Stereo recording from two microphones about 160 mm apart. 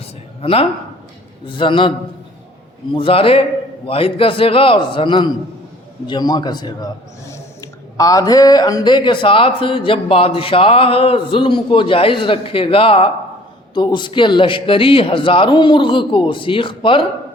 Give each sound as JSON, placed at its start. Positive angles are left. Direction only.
{"t": 0.0, "sound": "a sound", "side_deg": 35}
{"t": 1.5, "sound": "a man's voice", "side_deg": 35}
{"t": 2.9, "sound": "a man's voice", "side_deg": 35}